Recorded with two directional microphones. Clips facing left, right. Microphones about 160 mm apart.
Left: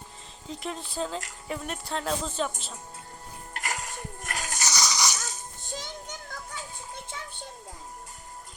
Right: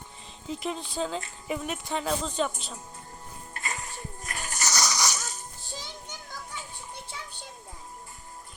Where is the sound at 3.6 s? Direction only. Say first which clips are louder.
Left 2 dB; 90° left.